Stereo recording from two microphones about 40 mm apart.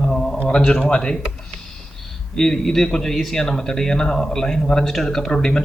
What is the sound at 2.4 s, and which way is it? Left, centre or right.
A man's voice, centre.